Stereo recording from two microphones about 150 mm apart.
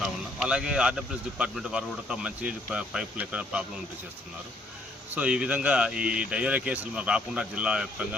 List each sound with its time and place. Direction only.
0.0 s speech: 5° right (ahead or behind)
5.1 s speech: 5° right (ahead or behind)